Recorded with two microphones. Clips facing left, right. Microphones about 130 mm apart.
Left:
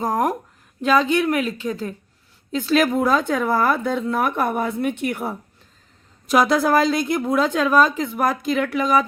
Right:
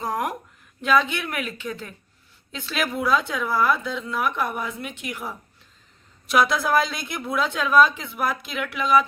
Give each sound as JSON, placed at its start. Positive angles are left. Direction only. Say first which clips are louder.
{"t": 0.0, "sound": "a woman's voice", "louder": "left 6 dB", "side_deg": 45}
{"t": 6.2, "sound": "a woman's voice", "louder": "left 4 dB", "side_deg": 40}